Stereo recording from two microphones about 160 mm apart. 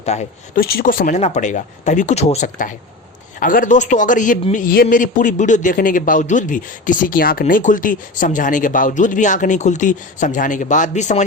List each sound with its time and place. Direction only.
0.0 s speech: 45° left (ahead or behind)
0.6 s speech: 70° left (ahead or behind)
1.2 s speech: 45° left (ahead or behind)